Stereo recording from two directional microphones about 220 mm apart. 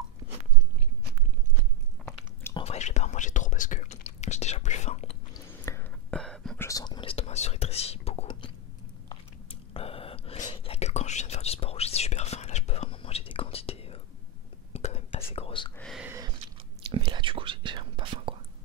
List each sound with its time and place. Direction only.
2.0 s biting: 5° left (ahead or behind)
2.5 s whispering: 30° left (ahead or behind)
5.3 s whispering: 10° left (ahead or behind)
6.7 s whispering: 20° left (ahead or behind)
15.8 s a sound: centre (ahead or behind)
16.9 s whispering: 20° right (ahead or behind)